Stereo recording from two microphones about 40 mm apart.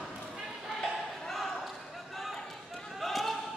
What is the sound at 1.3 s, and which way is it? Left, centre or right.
Basketball bounce, centre.